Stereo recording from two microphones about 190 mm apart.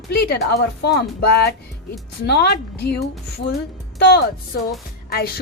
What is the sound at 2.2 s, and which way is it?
A woman's voice, 60° left (ahead or behind).